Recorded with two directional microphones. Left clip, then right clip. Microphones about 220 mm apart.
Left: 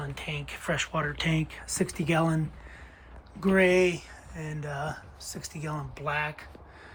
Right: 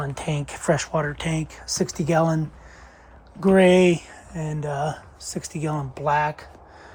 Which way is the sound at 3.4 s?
30° right (ahead or behind).